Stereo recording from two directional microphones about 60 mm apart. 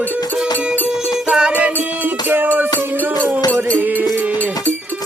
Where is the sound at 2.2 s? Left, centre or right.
Right.